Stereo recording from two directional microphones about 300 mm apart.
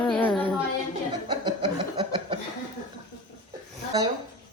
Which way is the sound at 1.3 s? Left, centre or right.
Centre.